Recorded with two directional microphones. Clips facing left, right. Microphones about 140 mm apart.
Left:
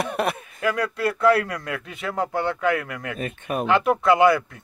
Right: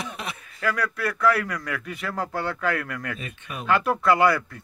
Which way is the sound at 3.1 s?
50° left (ahead or behind).